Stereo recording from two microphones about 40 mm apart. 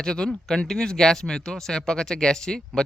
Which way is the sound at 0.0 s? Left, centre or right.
Centre.